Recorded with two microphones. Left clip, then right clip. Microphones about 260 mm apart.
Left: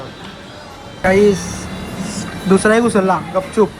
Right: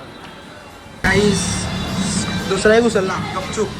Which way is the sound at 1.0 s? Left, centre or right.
Centre.